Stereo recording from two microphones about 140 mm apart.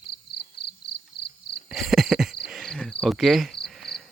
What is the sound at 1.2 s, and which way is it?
Insect, 90° left.